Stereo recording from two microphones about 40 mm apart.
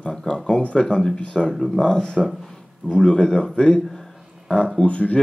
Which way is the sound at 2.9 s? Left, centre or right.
Centre.